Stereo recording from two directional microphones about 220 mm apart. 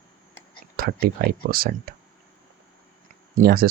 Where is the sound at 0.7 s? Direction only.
40° right (ahead or behind).